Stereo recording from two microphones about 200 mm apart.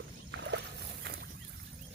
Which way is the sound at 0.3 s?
60° right (ahead or behind).